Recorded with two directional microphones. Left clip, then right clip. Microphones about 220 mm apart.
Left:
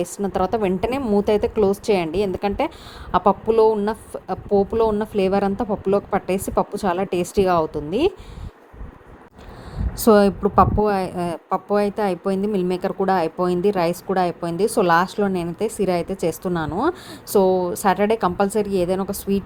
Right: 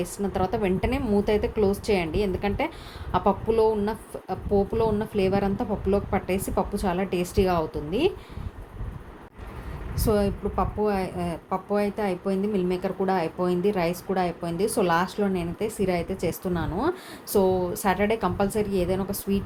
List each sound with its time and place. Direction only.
0.0 s speech: 35° left (ahead or behind)
10.0 s speech: 35° left (ahead or behind)